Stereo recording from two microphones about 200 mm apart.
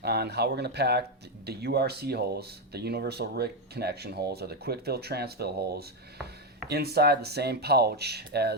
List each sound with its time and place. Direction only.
0.0 s speech: 55° right (ahead or behind)